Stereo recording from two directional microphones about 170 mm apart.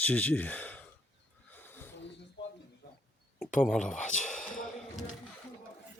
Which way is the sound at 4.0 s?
45° left (ahead or behind).